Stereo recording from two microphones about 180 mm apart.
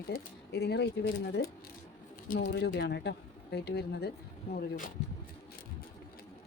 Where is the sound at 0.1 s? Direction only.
65° left (ahead or behind).